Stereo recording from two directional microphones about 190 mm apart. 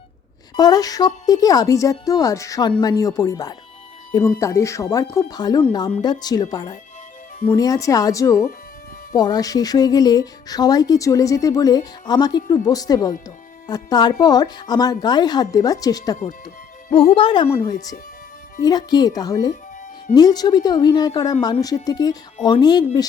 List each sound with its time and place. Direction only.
0.5 s speech: 20° left (ahead or behind)